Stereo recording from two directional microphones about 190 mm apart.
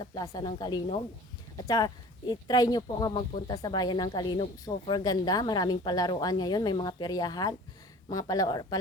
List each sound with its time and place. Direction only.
0.0 s speech: 20° left (ahead or behind)